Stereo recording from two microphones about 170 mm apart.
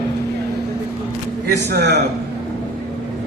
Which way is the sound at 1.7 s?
75° right (ahead or behind).